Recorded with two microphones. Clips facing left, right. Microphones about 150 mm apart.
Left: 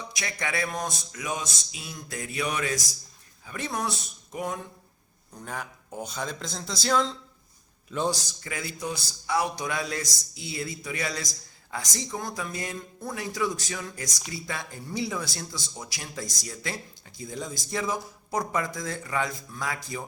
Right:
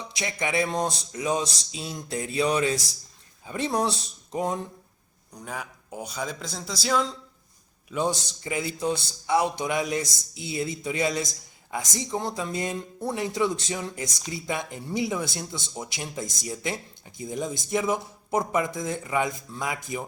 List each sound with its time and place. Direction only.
0.2 s speech: 20° right (ahead or behind)
5.3 s a man's voice: 10° right (ahead or behind)
8.1 s speech: 20° right (ahead or behind)